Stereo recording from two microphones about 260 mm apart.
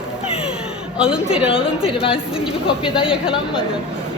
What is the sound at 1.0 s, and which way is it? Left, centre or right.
Speech, centre.